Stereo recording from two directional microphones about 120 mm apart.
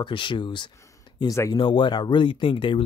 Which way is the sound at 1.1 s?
30° left (ahead or behind).